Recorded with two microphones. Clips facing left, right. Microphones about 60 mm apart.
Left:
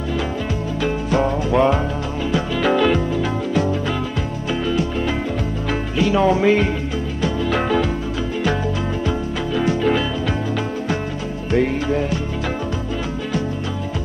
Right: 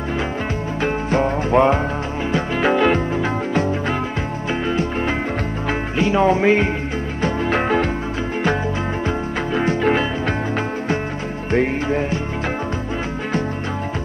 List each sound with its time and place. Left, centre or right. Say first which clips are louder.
0.8 s music: even; right
4.5 s music: even; right
9.0 s music: even; right
11.5 s music: even; right